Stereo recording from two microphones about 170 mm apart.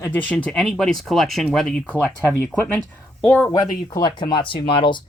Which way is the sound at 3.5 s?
20° left (ahead or behind).